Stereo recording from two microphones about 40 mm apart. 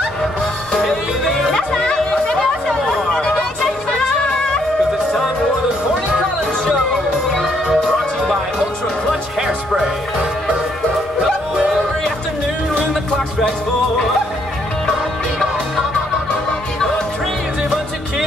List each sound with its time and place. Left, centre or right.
0.8 s music: centre
3.1 s music: centre
6.9 s music: centre
7.4 s music: centre